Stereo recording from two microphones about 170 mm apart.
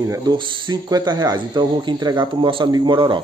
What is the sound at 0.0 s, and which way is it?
Speech, 25° right (ahead or behind).